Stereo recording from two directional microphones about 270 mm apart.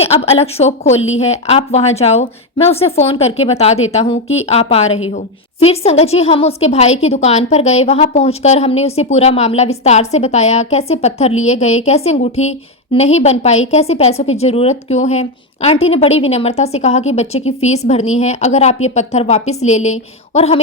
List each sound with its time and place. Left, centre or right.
0.0 s a woman's voice: left